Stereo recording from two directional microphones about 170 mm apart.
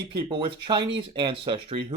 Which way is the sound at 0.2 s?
30° right (ahead or behind).